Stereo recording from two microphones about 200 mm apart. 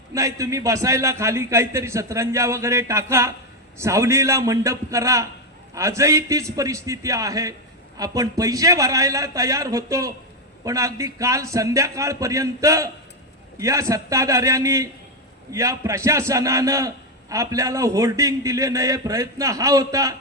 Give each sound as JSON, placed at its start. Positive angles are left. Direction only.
{"t": 0.1, "sound": "a man's voice", "side_deg": -15}